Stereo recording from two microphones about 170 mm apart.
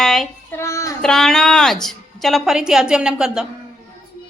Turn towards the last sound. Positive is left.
turn(degrees=-5)  # may be behind; listen again after turning